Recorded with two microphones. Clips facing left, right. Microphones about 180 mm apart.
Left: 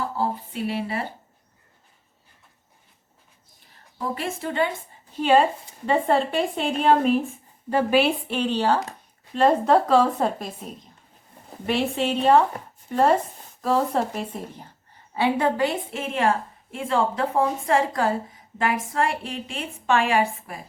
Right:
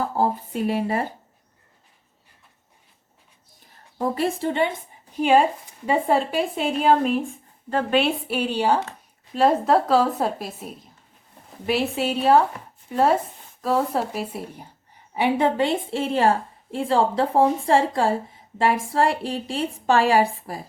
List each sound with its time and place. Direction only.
0.2 s speech: 45° right (ahead or behind)
3.9 s a woman's voice: 35° right (ahead or behind)
5.1 s a woman's voice: 10° right (ahead or behind); by 8.1 s 5° left (ahead or behind)
8.3 s a woman's voice: 10° right (ahead or behind); by 20.7 s 35° right (ahead or behind)